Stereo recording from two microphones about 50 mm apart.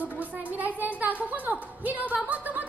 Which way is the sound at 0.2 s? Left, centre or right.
Right.